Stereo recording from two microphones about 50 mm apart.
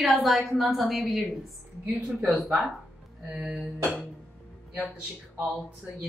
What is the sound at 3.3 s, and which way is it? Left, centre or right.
Music, centre.